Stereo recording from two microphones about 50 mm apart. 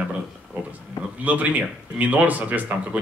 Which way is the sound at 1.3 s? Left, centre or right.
Right.